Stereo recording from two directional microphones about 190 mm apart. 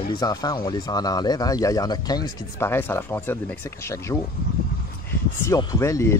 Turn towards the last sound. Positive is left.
turn(degrees=15)  # may be behind; listen again after turning